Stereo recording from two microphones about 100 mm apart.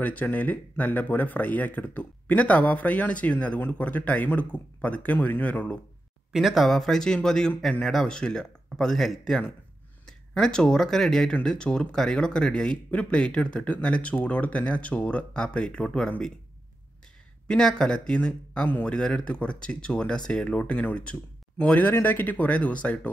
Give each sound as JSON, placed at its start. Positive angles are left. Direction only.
{"t": 0.0, "sound": "speech", "side_deg": 15}
{"t": 6.3, "sound": "a man's voice", "side_deg": 0}
{"t": 17.5, "sound": "speech", "side_deg": 5}